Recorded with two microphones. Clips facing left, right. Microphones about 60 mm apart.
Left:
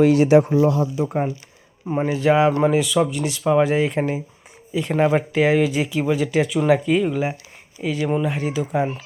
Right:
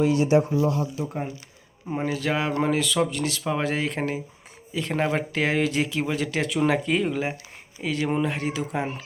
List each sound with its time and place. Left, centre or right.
0.0 s speech: left
2.1 s speech: centre